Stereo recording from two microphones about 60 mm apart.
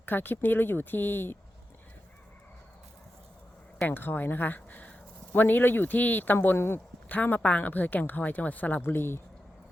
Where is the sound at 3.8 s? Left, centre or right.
Left.